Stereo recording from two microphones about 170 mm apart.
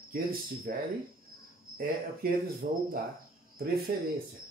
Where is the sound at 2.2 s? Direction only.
60° right (ahead or behind).